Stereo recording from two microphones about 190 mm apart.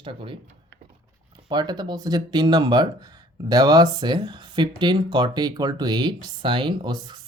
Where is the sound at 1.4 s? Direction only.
20° right (ahead or behind).